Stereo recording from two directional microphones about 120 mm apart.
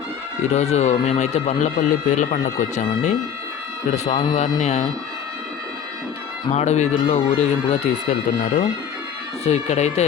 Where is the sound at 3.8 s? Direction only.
70° left (ahead or behind).